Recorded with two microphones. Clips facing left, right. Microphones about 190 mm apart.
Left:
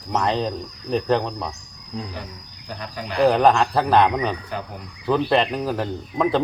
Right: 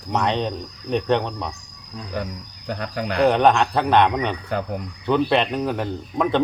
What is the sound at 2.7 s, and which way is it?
Cricket, 60° right (ahead or behind).